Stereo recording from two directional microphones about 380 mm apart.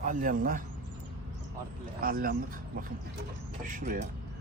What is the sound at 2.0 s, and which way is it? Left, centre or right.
A man's voice, right.